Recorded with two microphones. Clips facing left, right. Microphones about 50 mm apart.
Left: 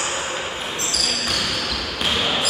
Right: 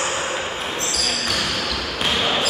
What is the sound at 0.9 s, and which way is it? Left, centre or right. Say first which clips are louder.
Basketball bounce: left 1 dB; centre.